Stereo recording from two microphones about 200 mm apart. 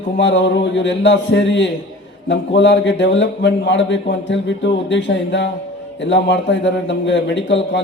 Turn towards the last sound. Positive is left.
turn(degrees=65)  # may be behind; listen again after turning